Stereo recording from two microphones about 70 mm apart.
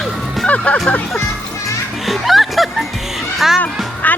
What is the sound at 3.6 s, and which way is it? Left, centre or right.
Music, left.